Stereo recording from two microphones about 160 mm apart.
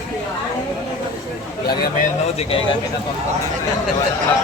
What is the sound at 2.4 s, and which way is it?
Speech, 35° left (ahead or behind).